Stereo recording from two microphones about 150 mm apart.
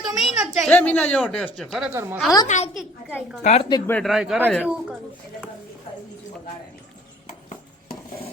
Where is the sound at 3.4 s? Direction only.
45° left (ahead or behind).